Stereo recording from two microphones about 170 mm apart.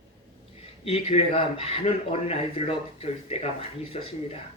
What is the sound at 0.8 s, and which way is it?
Speech, 35° left (ahead or behind).